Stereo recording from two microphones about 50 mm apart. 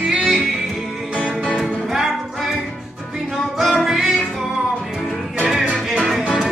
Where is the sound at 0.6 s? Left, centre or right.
Centre.